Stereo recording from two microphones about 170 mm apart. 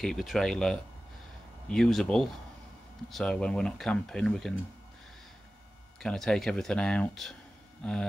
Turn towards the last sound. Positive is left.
turn(degrees=5)  # may be behind; listen again after turning